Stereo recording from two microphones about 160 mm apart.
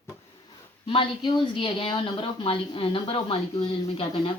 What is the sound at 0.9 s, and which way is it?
Speech, 30° left (ahead or behind).